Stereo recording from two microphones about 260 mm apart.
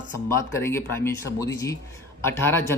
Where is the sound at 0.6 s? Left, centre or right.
Centre.